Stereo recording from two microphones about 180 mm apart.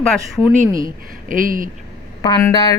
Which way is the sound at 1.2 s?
50° right (ahead or behind).